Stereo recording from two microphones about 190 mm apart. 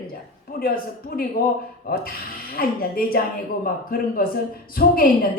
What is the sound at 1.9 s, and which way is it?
Speech, 50° left (ahead or behind).